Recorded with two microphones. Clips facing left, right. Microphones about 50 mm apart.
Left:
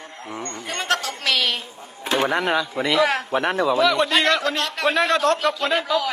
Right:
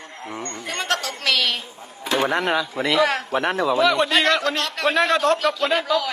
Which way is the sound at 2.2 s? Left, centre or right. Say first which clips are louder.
Even; centre.